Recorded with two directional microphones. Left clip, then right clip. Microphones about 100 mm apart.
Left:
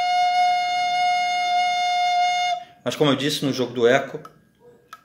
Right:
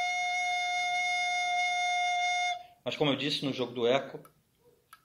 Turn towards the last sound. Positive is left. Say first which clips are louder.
# left 10 dB
turn(degrees=40)  # may be behind; listen again after turning